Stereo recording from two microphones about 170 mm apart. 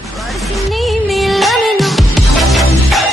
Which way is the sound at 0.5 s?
Centre (ahead or behind).